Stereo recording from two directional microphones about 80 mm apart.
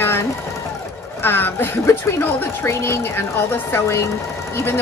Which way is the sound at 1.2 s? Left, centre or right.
Left.